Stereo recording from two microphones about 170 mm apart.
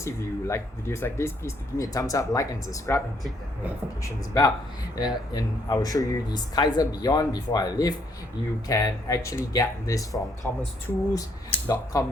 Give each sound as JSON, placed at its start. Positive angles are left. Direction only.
{"t": 0.0, "sound": "speech", "side_deg": 15}
{"t": 4.0, "sound": "speech", "side_deg": 20}